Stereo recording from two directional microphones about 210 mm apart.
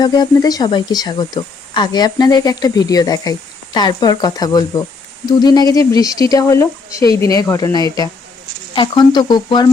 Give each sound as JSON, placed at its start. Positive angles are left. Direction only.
{"t": 0.0, "sound": "speech", "side_deg": 20}